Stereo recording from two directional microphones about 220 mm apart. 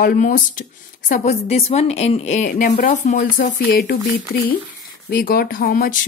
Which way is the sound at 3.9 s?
50° left (ahead or behind).